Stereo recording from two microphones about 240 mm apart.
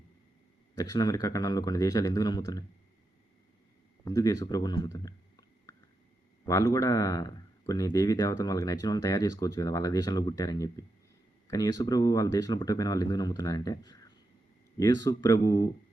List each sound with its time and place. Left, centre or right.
0.8 s speech: centre
4.0 s speech: centre